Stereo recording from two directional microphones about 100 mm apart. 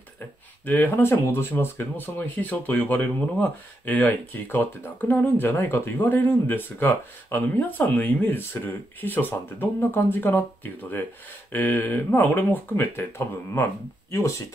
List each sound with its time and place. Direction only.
0.7 s speech: 20° left (ahead or behind)